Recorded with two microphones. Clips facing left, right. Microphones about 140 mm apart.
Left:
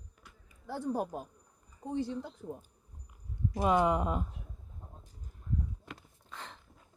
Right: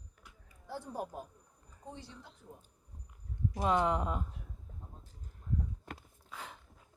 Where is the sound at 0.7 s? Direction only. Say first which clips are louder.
Left 7 dB; 80° left.